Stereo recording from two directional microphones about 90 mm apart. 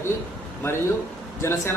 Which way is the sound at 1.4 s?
30° left (ahead or behind).